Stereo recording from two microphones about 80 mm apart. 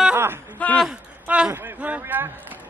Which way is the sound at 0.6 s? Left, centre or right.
Centre.